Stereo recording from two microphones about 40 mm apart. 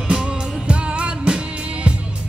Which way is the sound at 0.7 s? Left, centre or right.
Right.